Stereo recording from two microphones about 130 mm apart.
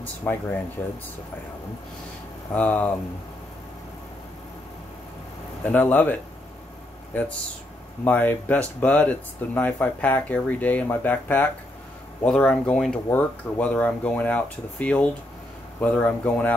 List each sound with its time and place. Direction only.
0.0 s speech: 15° left (ahead or behind)
2.5 s speech: 10° left (ahead or behind)
5.6 s speech: 15° left (ahead or behind)
8.0 s speech: 15° left (ahead or behind)